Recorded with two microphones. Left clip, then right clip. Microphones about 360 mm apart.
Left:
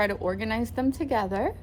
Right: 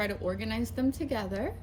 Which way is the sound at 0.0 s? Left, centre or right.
Centre.